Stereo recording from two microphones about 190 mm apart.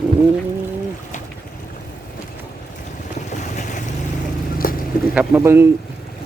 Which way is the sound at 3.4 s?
40° left (ahead or behind).